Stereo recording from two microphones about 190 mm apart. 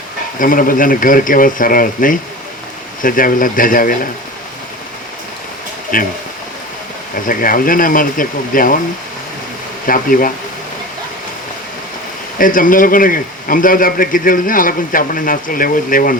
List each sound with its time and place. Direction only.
0.3 s speech: 45° left (ahead or behind)
5.9 s speech: 45° left (ahead or behind)
7.3 s speech: 45° left (ahead or behind)
9.8 s speech: 45° left (ahead or behind)
12.4 s speech: 45° left (ahead or behind)